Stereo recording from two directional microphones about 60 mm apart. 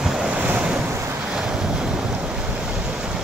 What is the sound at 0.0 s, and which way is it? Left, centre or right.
Waves, centre.